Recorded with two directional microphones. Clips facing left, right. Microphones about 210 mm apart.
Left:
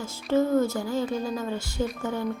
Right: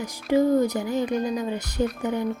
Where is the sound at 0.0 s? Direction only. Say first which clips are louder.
Right 3 dB; 15° right (ahead or behind).